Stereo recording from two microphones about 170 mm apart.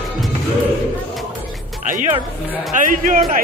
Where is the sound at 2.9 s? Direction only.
50° right (ahead or behind).